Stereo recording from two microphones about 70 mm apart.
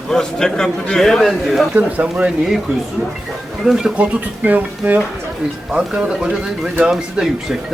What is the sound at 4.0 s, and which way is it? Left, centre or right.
Speech, right.